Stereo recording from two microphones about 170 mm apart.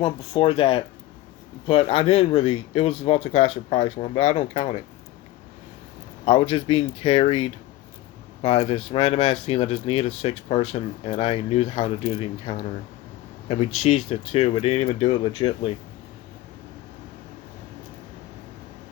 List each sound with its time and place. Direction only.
0.0 s speech: 30° left (ahead or behind)
6.2 s speech: 35° left (ahead or behind)